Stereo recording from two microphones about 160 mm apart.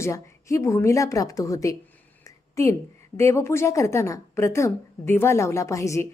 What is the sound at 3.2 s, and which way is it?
Speech, 15° left (ahead or behind).